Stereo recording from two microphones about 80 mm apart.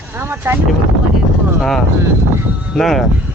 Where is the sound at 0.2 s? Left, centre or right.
Right.